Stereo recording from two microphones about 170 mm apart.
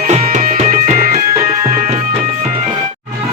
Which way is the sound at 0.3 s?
50° right (ahead or behind).